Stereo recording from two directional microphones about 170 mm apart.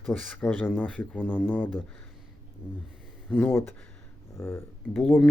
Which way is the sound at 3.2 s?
10° left (ahead or behind).